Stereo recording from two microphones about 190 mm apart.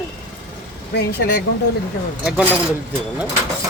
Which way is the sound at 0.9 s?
60° left (ahead or behind).